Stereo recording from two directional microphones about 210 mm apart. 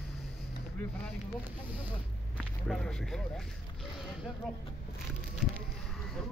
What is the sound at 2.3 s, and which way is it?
Speech, centre (ahead or behind).